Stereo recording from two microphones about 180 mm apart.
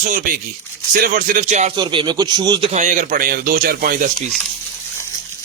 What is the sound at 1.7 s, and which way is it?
Speech, 25° right (ahead or behind).